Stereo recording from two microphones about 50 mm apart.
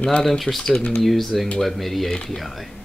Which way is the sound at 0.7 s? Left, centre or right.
Centre.